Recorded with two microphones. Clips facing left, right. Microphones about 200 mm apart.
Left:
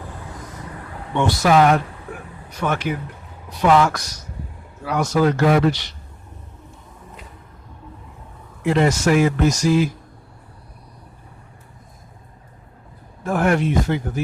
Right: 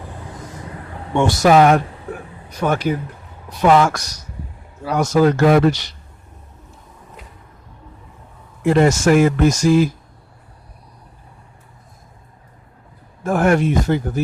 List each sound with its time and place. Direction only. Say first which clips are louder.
1.1 s speech: right 3 dB; 45° right (ahead or behind)
8.6 s speech: right 4 dB; 45° right (ahead or behind)
13.2 s speech: right 3 dB; 45° right (ahead or behind)